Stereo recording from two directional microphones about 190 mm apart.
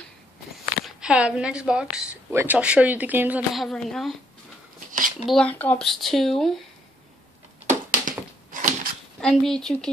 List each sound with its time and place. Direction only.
0.8 s a woman's voice: 5° right (ahead or behind)
4.7 s a sound: 45° right (ahead or behind)
5.2 s a woman's voice: 5° left (ahead or behind)
8.0 s typewriter: 45° right (ahead or behind)
9.2 s a woman's voice: 5° left (ahead or behind)